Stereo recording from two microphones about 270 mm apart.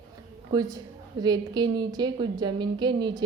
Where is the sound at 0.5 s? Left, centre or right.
Centre.